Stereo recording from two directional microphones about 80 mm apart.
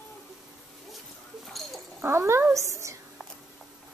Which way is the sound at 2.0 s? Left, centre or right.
Right.